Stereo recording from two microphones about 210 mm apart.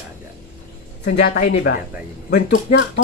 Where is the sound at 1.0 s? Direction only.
50° left (ahead or behind).